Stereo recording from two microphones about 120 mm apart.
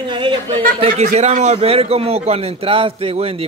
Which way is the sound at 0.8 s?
65° right (ahead or behind).